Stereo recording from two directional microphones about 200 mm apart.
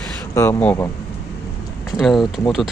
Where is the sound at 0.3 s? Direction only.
10° left (ahead or behind).